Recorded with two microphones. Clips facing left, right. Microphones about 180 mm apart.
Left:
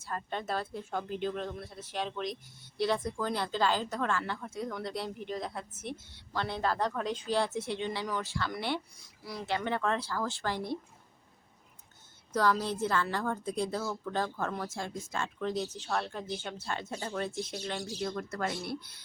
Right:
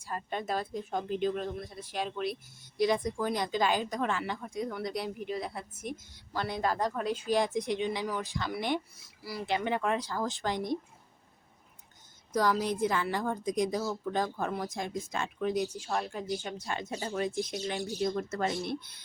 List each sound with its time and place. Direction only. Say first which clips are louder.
0.0 s speech: right 1 dB; 10° right (ahead or behind)
12.3 s speech: right 1 dB; 15° right (ahead or behind)